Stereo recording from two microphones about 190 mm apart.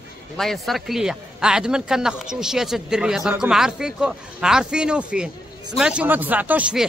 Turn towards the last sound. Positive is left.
turn(degrees=-5)  # may be behind; listen again after turning